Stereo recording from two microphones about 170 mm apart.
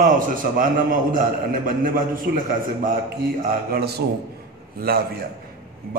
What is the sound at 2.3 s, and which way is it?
Speech, 70° right (ahead or behind).